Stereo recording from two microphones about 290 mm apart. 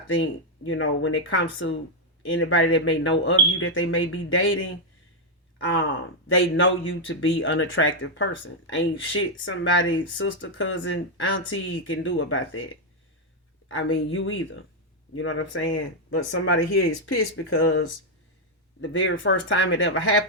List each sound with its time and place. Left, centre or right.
0.2 s speech: left